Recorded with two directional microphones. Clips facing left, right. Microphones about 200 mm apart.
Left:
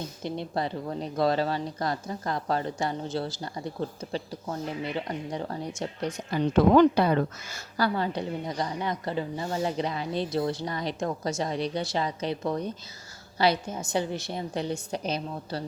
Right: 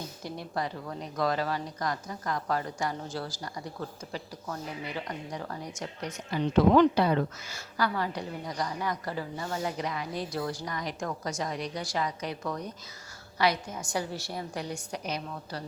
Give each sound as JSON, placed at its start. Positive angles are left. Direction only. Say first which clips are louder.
{"t": 0.2, "sound": "speech", "louder": "left 4 dB", "side_deg": 25}
{"t": 6.3, "sound": "speech", "louder": "left 2 dB", "side_deg": 50}
{"t": 7.8, "sound": "speech", "louder": "left 3 dB", "side_deg": 30}